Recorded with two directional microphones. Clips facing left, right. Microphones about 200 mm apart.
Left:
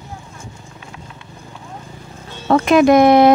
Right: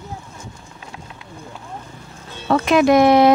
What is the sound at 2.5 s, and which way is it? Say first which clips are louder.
Speech: left 3 dB; 50° left (ahead or behind).